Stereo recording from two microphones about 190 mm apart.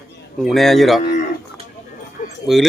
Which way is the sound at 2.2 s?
40° left (ahead or behind).